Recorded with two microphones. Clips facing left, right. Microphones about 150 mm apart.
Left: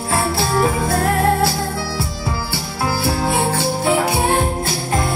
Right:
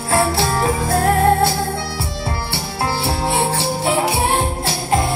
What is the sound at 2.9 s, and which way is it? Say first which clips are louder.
Music: left 2 dB; 30° right (ahead or behind).